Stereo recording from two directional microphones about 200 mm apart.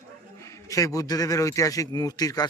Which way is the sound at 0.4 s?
15° left (ahead or behind).